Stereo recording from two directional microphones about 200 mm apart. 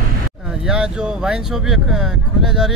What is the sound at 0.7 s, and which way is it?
Speech, 5° right (ahead or behind).